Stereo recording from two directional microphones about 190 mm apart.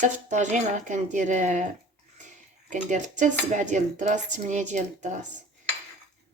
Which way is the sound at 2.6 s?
40° right (ahead or behind).